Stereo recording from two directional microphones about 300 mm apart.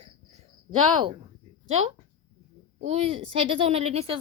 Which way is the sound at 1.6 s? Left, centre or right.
Right.